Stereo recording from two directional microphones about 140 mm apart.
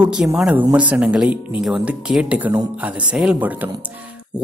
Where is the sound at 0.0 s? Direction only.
5° right (ahead or behind).